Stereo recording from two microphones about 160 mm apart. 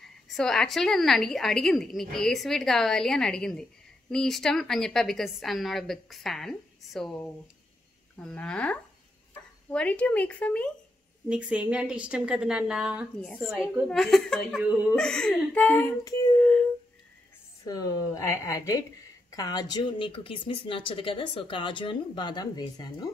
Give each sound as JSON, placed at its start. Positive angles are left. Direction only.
{"t": 0.3, "sound": "a woman's voice", "side_deg": 5}
{"t": 11.2, "sound": "a woman's voice", "side_deg": -5}
{"t": 13.2, "sound": "a woman's voice", "side_deg": 5}
{"t": 14.6, "sound": "a woman's voice", "side_deg": -10}
{"t": 15.0, "sound": "speech", "side_deg": 5}
{"t": 16.0, "sound": "a woman's voice", "side_deg": 20}
{"t": 17.6, "sound": "a woman's voice", "side_deg": 25}